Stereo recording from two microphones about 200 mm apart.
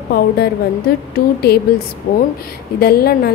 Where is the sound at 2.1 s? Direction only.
40° left (ahead or behind).